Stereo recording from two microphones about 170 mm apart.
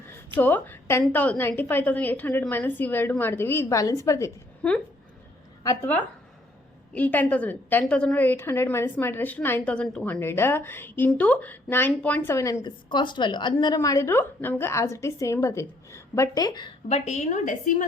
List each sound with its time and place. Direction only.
0.3 s a woman's voice: 10° left (ahead or behind)
4.6 s a woman's voice: 5° left (ahead or behind); by 16.7 s 25° left (ahead or behind)
16.9 s a woman's voice: 40° left (ahead or behind)